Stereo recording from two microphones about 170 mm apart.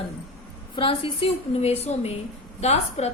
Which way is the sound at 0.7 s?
30° left (ahead or behind).